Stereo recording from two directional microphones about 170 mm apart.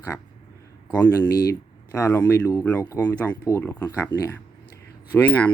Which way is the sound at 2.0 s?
15° left (ahead or behind).